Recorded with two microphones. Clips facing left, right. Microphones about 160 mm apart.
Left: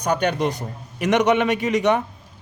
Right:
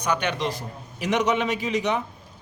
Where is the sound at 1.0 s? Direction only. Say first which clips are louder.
Left 5 dB; 60° left (ahead or behind).